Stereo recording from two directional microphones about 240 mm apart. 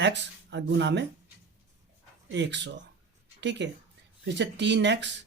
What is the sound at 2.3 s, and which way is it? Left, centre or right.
Speech, right.